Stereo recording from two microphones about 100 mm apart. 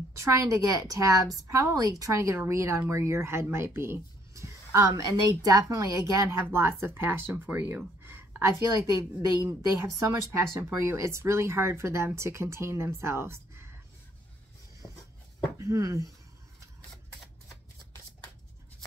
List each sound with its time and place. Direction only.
0.2 s a woman's voice: 30° right (ahead or behind)
15.5 s speech: 30° right (ahead or behind)